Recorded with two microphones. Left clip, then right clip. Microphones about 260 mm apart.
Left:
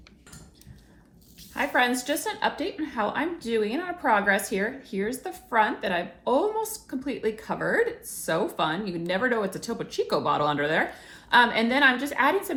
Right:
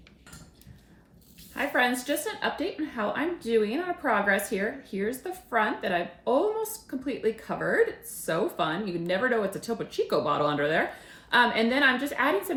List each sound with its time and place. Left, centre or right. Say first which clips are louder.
1.5 s speech: left 2 dB; centre